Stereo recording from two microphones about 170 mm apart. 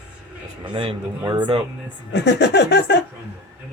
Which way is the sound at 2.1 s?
90° left.